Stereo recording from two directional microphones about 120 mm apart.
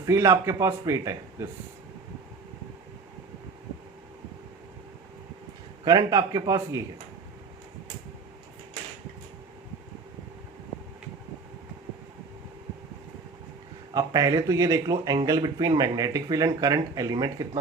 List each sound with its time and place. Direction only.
0.0 s a man's voice: 25° right (ahead or behind)
5.8 s speech: 35° right (ahead or behind)
13.9 s speech: 30° right (ahead or behind)